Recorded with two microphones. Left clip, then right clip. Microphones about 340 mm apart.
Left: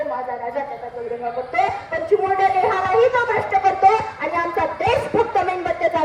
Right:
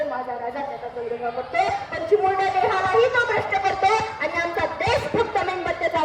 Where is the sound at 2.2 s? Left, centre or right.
Left.